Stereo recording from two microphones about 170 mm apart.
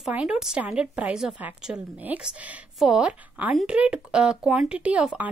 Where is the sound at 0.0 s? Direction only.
5° right (ahead or behind).